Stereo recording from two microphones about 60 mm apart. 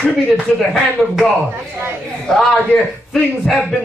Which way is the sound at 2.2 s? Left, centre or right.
Centre.